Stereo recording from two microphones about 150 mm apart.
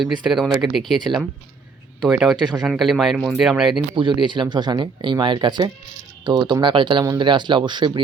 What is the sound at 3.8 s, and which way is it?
Speech, 30° right (ahead or behind).